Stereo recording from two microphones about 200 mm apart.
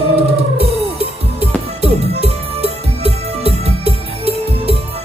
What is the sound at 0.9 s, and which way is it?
Music, 30° right (ahead or behind).